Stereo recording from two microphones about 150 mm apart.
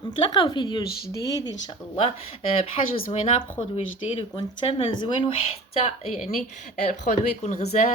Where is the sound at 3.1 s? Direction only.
45° left (ahead or behind).